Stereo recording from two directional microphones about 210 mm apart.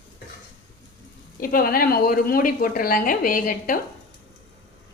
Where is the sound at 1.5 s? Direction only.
45° left (ahead or behind).